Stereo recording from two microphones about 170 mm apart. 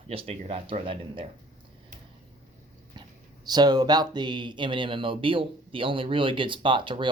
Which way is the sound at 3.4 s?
25° right (ahead or behind).